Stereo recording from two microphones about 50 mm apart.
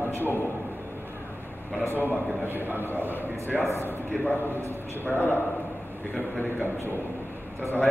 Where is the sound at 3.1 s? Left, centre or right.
Left.